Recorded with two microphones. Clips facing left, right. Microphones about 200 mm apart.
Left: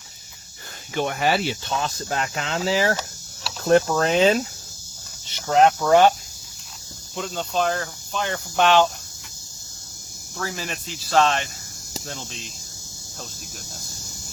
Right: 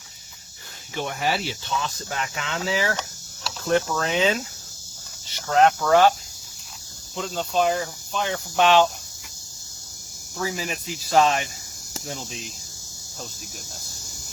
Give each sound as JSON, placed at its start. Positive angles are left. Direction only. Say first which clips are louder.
{"t": 0.9, "sound": "speech", "louder": "left 4 dB", "side_deg": 65}
{"t": 2.0, "sound": "speech", "louder": "left 4 dB", "side_deg": 40}
{"t": 5.5, "sound": "speech", "louder": "left 2 dB", "side_deg": 15}
{"t": 7.2, "sound": "speech", "louder": "right 1 dB", "side_deg": 0}
{"t": 10.3, "sound": "speech", "louder": "right 2 dB", "side_deg": -5}